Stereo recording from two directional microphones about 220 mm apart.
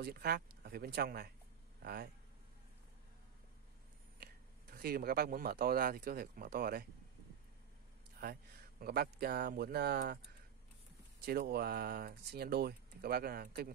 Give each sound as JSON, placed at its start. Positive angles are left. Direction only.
{"t": 0.0, "sound": "a man's voice", "side_deg": -45}
{"t": 4.2, "sound": "speech", "side_deg": -45}
{"t": 8.2, "sound": "speech", "side_deg": -45}
{"t": 11.2, "sound": "speech", "side_deg": -45}